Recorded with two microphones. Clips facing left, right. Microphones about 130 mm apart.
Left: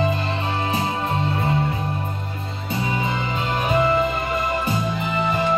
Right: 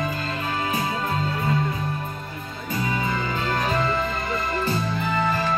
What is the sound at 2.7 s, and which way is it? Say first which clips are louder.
Music: left 1 dB; 20° left (ahead or behind).